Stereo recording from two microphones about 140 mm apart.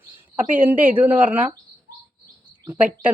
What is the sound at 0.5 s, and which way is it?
Speech, 10° right (ahead or behind).